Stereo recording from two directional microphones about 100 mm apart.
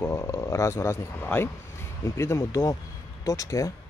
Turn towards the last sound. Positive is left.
turn(degrees=35)  # may be behind; listen again after turning